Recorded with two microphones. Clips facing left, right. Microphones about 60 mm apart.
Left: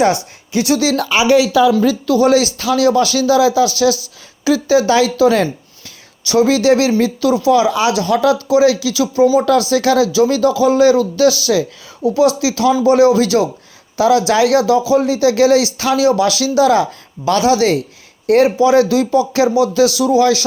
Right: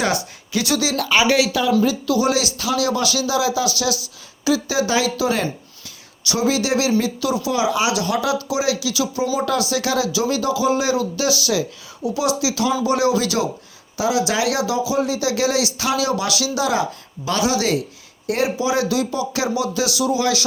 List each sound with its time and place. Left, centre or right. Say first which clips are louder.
0.5 s speech: left 6 dB; left
1.8 s speech: left 6 dB; left
9.2 s speech: left 12 dB; centre
9.5 s speech: left 8 dB; left
13.9 s speech: left 8 dB; left
19.7 s speech: left 8 dB; left